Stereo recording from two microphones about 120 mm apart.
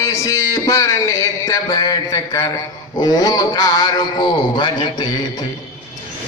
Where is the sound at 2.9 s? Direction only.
35° left (ahead or behind).